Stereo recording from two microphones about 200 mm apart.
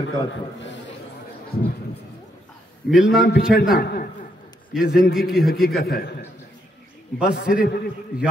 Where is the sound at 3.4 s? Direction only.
5° right (ahead or behind).